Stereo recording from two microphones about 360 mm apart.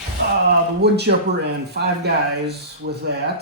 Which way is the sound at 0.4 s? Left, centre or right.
Right.